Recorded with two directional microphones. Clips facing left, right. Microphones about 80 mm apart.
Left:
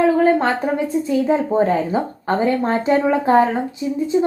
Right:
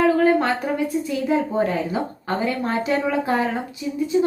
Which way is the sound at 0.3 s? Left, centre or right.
Left.